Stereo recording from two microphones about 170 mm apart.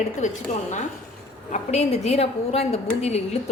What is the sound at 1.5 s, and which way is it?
Speech, 40° left (ahead or behind).